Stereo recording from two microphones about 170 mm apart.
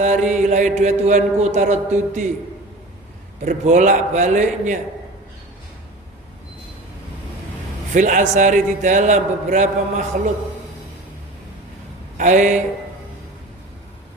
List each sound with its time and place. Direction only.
0.0 s mantra: 45° right (ahead or behind)
3.4 s mantra: 45° right (ahead or behind)
7.9 s mantra: 50° right (ahead or behind)
12.1 s speech: 45° right (ahead or behind)